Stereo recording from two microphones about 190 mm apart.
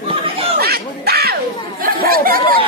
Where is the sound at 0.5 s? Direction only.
55° right (ahead or behind).